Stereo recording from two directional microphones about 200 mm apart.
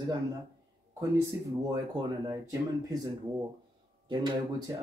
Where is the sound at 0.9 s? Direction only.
15° right (ahead or behind).